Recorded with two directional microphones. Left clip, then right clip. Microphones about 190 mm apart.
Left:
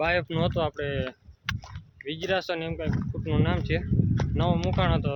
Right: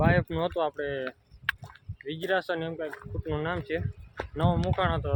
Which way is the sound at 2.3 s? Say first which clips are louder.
Even; 5° left (ahead or behind).